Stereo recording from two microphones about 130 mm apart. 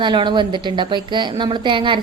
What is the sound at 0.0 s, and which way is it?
A woman's voice, 35° right (ahead or behind).